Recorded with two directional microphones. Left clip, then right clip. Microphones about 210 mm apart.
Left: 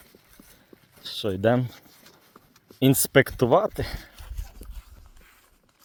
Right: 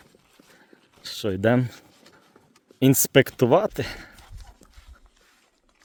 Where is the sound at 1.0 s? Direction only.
20° right (ahead or behind).